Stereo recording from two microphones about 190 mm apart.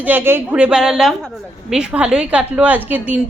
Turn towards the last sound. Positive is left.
turn(degrees=-10)  # may be behind; listen again after turning